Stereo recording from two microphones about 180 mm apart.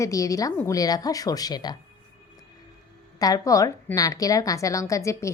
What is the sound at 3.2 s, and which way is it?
A woman's voice, 20° left (ahead or behind).